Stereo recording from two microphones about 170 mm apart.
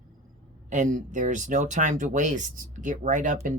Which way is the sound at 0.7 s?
50° right (ahead or behind).